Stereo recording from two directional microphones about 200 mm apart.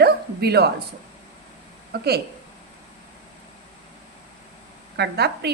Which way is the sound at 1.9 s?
50° right (ahead or behind).